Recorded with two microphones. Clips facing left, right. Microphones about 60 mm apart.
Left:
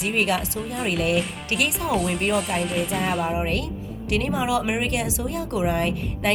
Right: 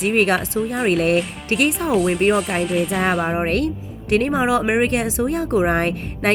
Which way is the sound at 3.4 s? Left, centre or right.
Right.